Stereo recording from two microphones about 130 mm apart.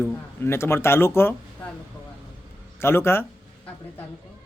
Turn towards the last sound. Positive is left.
turn(degrees=20)  # may be behind; listen again after turning